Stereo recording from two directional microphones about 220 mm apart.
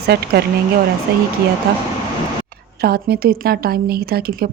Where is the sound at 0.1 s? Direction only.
45° right (ahead or behind).